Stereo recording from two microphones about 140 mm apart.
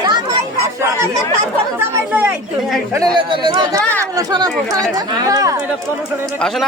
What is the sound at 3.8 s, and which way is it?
Speech, 10° left (ahead or behind).